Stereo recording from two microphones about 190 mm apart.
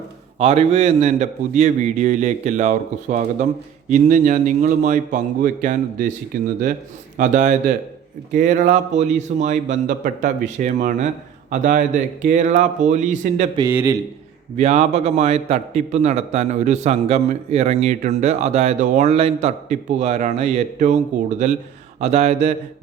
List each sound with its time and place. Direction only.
0.3 s a man's voice: 35° right (ahead or behind)
7.2 s a man's voice: 40° right (ahead or behind)
13.6 s a man's voice: 15° right (ahead or behind)
14.5 s a man's voice: 35° right (ahead or behind)